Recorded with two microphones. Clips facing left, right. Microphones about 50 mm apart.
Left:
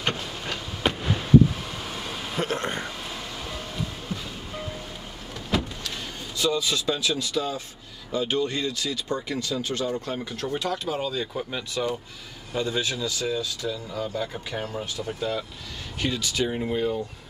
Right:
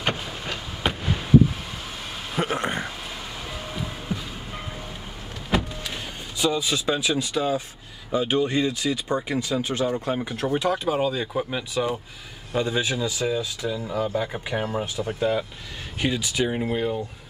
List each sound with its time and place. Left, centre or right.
0.0 s fireworks: centre
1.9 s music: centre
5.5 s power windows: centre
5.9 s speech: centre